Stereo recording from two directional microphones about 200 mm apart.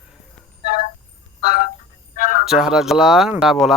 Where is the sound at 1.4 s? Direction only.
50° left (ahead or behind).